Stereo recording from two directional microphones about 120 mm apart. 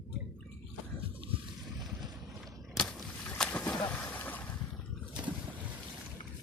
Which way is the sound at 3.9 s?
15° left (ahead or behind).